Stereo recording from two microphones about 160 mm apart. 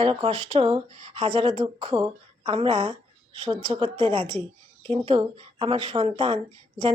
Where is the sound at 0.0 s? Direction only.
35° right (ahead or behind).